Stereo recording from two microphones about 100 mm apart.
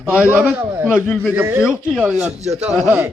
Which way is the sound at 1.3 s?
20° right (ahead or behind).